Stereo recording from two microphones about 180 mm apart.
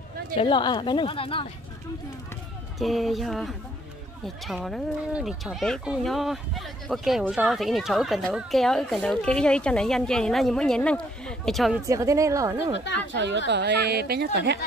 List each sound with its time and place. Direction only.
0.4 s speech: 25° left (ahead or behind)
2.8 s speech: centre (ahead or behind)
11.8 s speech: 15° right (ahead or behind)
13.1 s a woman's voice: 80° right